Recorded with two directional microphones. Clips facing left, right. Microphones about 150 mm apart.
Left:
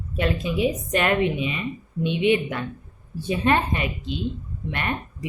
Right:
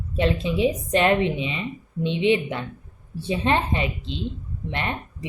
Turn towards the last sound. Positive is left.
turn(degrees=-25)  # may be behind; listen again after turning